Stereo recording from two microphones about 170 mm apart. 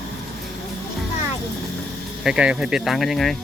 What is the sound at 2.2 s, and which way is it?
Speech, 5° right (ahead or behind).